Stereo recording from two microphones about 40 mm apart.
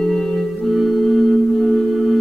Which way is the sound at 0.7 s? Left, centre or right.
Centre.